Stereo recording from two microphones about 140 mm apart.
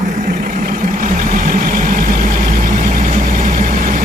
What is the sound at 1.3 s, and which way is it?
Vehicle, 70° right (ahead or behind).